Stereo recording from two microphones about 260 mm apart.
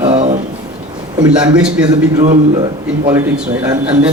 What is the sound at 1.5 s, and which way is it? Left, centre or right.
A man's voice, centre.